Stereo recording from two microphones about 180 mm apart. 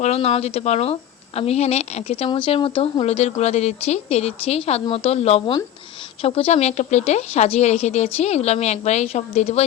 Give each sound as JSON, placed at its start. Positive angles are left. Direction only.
{"t": 0.0, "sound": "speech", "side_deg": 35}